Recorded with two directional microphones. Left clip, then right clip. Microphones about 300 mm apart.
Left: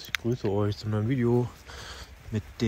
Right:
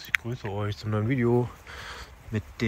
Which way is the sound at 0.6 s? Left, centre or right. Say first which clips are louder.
Left 2 dB; centre.